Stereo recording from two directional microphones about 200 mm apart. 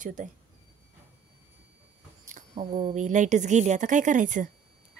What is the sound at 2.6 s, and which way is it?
Speech, 45° right (ahead or behind).